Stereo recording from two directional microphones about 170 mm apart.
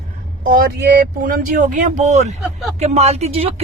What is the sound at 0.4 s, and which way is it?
Speech, 55° right (ahead or behind).